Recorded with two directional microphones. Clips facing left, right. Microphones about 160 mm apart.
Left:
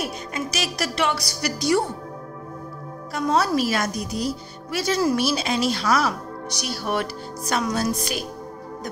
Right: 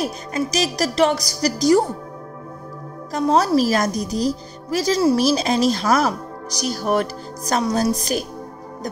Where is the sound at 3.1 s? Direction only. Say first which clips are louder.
Right 4 dB; 35° right (ahead or behind).